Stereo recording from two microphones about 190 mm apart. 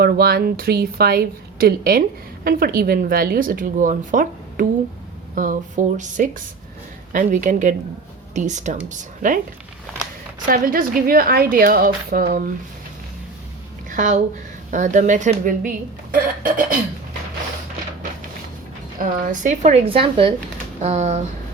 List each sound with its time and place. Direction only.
0.0 s a woman's voice: 55° right (ahead or behind)
10.4 s a woman's voice: 45° right (ahead or behind)
13.9 s a woman's voice: 40° right (ahead or behind)
19.2 s a woman's voice: 40° right (ahead or behind)